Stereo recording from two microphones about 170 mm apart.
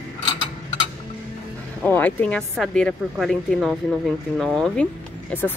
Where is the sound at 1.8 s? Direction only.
10° left (ahead or behind).